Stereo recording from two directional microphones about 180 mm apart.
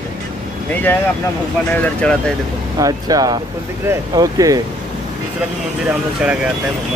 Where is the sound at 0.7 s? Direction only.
10° left (ahead or behind).